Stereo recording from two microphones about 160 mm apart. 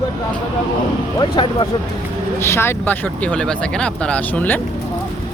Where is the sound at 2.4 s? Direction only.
15° left (ahead or behind).